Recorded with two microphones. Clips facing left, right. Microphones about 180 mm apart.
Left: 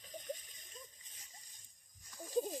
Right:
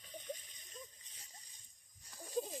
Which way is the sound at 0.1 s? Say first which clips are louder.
Left 2 dB; 45° left (ahead or behind).